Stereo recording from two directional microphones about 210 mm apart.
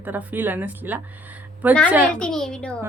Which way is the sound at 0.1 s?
10° right (ahead or behind).